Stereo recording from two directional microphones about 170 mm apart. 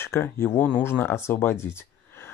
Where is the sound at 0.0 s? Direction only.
15° left (ahead or behind).